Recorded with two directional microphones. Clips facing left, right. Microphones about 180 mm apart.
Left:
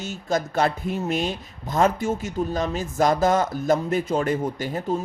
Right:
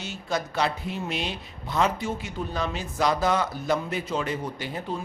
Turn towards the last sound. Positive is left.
turn(degrees=45)  # may be behind; listen again after turning